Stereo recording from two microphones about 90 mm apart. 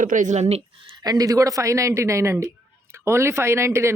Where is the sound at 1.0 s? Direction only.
45° right (ahead or behind).